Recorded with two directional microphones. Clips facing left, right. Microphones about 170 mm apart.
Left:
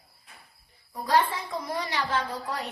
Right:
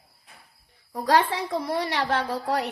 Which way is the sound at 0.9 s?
80° right.